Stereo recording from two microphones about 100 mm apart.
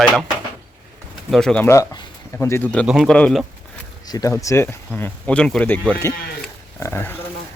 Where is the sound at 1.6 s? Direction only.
30° left (ahead or behind).